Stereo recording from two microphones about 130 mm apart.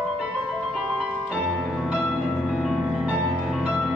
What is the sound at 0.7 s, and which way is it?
Music, centre (ahead or behind).